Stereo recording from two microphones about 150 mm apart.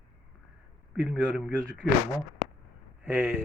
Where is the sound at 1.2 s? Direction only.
5° left (ahead or behind).